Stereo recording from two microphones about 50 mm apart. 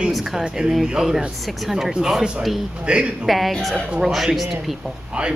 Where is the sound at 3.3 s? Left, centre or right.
Centre.